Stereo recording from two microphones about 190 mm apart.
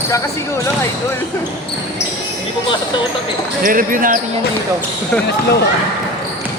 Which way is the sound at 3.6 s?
45° right (ahead or behind).